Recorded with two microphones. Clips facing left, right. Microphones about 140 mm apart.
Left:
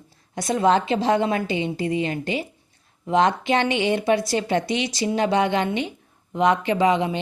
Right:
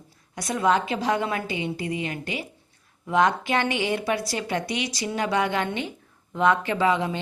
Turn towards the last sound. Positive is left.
turn(degrees=20)  # may be behind; listen again after turning